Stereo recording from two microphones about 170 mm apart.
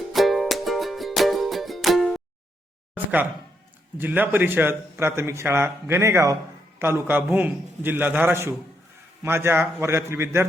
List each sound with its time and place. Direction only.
0.1 s music: centre (ahead or behind)
2.9 s a sound: 10° right (ahead or behind)
3.9 s a man's voice: 10° right (ahead or behind)